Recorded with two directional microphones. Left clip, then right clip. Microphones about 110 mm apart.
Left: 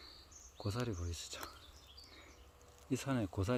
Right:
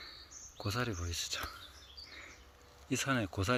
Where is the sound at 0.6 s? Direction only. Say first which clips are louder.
Right 5 dB; 10° left (ahead or behind).